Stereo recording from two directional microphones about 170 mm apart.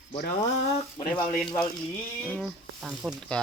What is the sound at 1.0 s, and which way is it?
Speech, 25° left (ahead or behind).